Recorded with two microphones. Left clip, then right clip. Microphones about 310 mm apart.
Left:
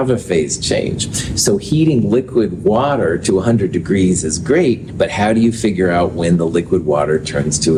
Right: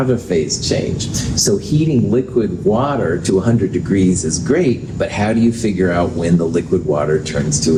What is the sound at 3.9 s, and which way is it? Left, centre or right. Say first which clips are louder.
Speech: even; left.